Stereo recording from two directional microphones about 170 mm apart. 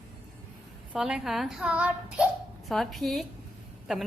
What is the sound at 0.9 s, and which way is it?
A woman's voice, 5° right (ahead or behind).